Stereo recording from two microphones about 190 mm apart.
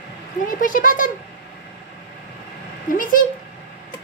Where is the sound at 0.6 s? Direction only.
45° left (ahead or behind).